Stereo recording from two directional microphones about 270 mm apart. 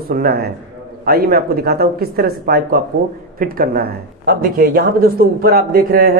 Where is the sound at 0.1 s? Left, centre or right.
Right.